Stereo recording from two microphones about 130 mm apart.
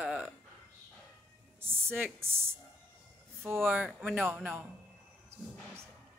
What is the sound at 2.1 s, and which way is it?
Speech, 20° right (ahead or behind).